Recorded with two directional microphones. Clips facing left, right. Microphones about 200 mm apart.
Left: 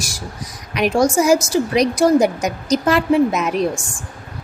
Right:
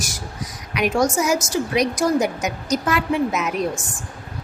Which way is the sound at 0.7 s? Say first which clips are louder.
Left 3 dB; 35° left (ahead or behind).